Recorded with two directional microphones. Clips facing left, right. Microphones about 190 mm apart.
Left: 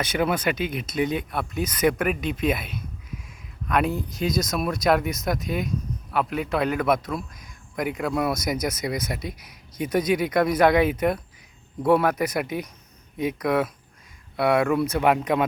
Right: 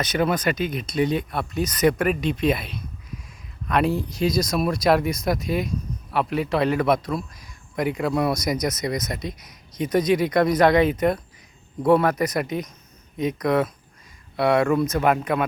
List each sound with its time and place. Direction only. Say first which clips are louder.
0.0 s speech: right 1 dB; 10° left (ahead or behind)